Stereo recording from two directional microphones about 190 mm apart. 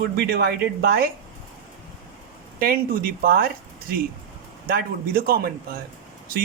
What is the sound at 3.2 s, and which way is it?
Speech, 50° right (ahead or behind).